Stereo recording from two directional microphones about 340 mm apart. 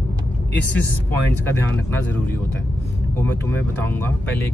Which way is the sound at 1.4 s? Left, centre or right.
Centre.